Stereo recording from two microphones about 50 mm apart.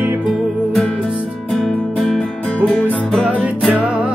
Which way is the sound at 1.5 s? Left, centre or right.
Centre.